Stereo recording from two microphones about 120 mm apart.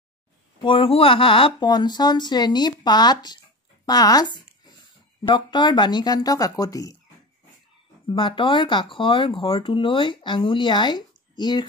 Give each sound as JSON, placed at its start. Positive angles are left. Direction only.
{"t": 0.6, "sound": "speech", "side_deg": 45}
{"t": 3.8, "sound": "a sound", "side_deg": 35}
{"t": 5.3, "sound": "speech", "side_deg": 40}
{"t": 8.1, "sound": "speech", "side_deg": 45}